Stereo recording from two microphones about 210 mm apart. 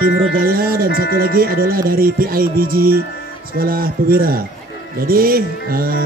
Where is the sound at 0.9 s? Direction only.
50° left (ahead or behind).